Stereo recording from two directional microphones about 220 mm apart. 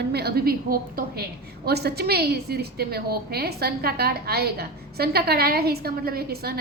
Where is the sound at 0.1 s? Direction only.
45° right (ahead or behind).